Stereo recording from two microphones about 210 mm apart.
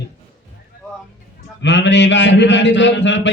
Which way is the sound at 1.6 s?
60° left (ahead or behind).